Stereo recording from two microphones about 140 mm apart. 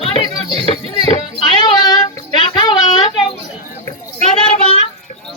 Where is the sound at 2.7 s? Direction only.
30° left (ahead or behind).